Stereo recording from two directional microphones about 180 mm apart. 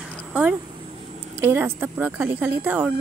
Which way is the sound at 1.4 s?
10° right (ahead or behind).